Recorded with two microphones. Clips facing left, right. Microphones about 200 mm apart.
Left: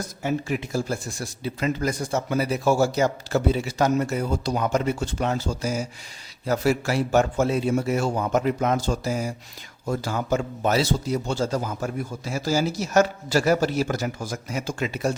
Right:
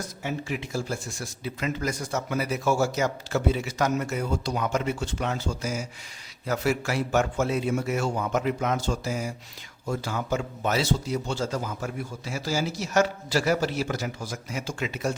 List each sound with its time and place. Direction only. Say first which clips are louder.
0.2 s a man's voice: left 6 dB; 45° left (ahead or behind)